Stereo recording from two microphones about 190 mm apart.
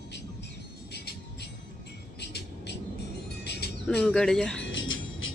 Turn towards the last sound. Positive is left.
turn(degrees=90)